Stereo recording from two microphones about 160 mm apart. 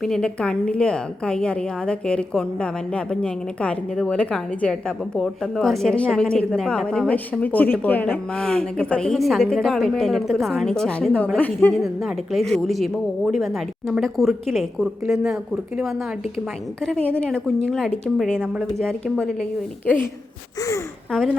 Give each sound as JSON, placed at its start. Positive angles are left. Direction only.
{"t": 0.0, "sound": "a woman's voice", "side_deg": 5}
{"t": 11.8, "sound": "a woman's voice", "side_deg": 0}
{"t": 20.6, "sound": "speech", "side_deg": 20}
{"t": 21.1, "sound": "a woman's voice", "side_deg": 5}